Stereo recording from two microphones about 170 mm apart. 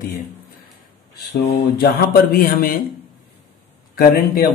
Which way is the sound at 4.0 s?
60° left (ahead or behind).